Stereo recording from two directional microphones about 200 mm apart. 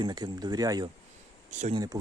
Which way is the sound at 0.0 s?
20° right (ahead or behind).